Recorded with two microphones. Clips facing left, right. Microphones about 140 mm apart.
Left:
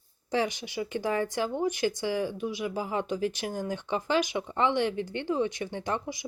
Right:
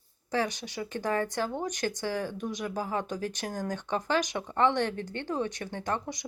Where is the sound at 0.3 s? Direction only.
15° left (ahead or behind).